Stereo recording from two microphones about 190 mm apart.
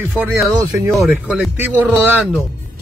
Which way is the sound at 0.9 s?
Centre (ahead or behind).